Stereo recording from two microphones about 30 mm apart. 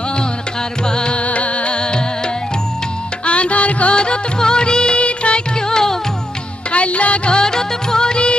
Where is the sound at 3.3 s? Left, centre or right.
Left.